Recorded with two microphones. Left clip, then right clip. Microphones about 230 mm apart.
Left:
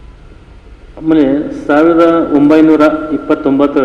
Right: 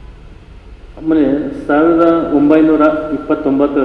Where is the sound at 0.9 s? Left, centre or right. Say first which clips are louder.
Left 3 dB; left.